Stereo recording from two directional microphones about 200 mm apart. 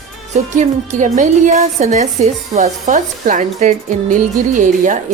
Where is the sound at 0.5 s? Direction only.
40° right (ahead or behind).